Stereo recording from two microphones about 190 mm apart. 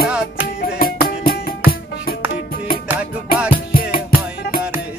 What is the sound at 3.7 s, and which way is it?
Music, 50° left (ahead or behind).